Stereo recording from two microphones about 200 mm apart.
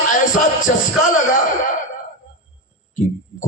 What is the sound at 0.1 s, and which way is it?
A man's voice, 40° left (ahead or behind).